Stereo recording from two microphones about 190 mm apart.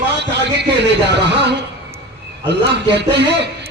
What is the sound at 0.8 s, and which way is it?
A man's voice, 65° right (ahead or behind).